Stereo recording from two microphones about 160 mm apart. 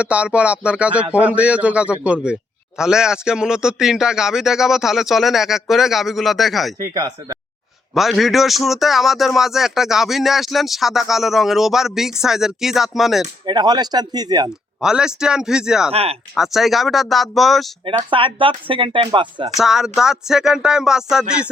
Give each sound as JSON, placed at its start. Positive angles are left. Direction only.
{"t": 0.0, "sound": "speech", "side_deg": -5}
{"t": 7.9, "sound": "speech", "side_deg": 0}
{"t": 13.4, "sound": "speech", "side_deg": -25}
{"t": 14.8, "sound": "speech", "side_deg": -5}
{"t": 15.9, "sound": "speech", "side_deg": -40}
{"t": 16.3, "sound": "speech", "side_deg": 0}
{"t": 17.8, "sound": "speech", "side_deg": -30}
{"t": 19.5, "sound": "speech", "side_deg": 0}